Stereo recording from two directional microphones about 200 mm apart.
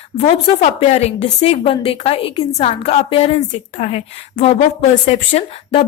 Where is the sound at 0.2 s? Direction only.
30° left (ahead or behind).